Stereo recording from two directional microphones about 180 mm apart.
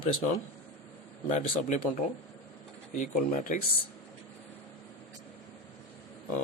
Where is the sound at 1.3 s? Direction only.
45° left (ahead or behind).